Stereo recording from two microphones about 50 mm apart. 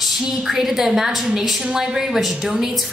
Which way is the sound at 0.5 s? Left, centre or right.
Centre.